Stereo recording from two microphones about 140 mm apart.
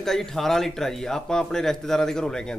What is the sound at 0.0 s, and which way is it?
Speech, 5° left (ahead or behind).